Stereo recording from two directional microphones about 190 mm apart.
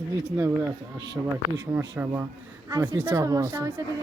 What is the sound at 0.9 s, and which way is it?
Speech, 65° right (ahead or behind).